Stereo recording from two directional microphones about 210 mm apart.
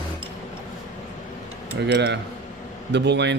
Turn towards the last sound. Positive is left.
turn(degrees=-55)  # may be behind; listen again after turning